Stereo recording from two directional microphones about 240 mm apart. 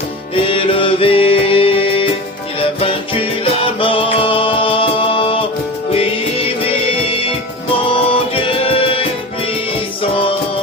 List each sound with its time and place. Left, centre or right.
0.3 s music: left